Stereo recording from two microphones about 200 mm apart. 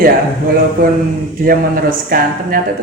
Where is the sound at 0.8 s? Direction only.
50° right (ahead or behind).